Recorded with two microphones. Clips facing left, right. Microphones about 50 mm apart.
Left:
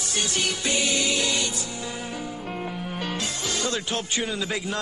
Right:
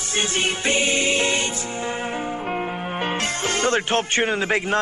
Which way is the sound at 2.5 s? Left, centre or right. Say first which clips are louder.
Right 5 dB; right.